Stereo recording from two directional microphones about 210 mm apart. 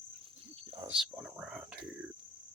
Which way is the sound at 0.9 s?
5° right (ahead or behind).